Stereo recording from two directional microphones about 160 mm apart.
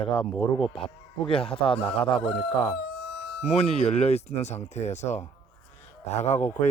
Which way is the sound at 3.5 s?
40° left (ahead or behind).